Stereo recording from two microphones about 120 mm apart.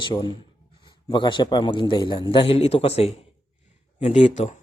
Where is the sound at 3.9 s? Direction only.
75° left (ahead or behind).